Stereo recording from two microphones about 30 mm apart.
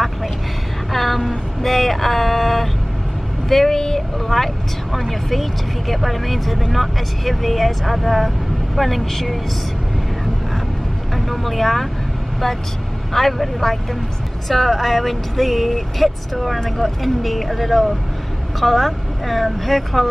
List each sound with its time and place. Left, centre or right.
0.9 s vehicle: centre
3.4 s speech: centre
4.9 s speech: centre
11.1 s speech: centre
13.1 s speech: centre